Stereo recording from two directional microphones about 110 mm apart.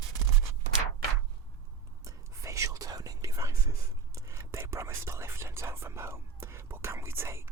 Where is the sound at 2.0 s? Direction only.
30° right (ahead or behind).